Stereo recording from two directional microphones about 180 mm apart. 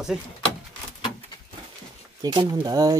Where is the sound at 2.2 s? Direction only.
20° right (ahead or behind).